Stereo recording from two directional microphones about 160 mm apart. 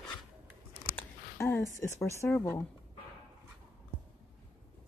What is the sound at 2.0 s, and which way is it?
Speech, 15° left (ahead or behind).